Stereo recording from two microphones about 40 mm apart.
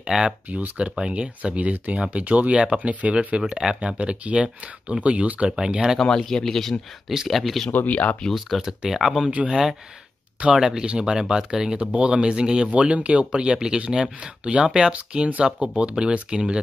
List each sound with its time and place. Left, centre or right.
0.1 s speech: centre; by 2.5 s right
2.5 s speech: right
3.4 s speech: centre
4.0 s speech: right
6.0 s speech: centre
7.7 s speech: left
8.3 s speech: centre
12.6 s speech: right
15.4 s speech: right